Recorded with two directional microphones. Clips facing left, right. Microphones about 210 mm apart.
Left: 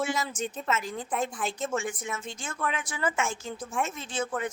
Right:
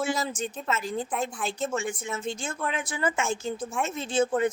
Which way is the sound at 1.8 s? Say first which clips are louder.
Right 3 dB; 25° right (ahead or behind).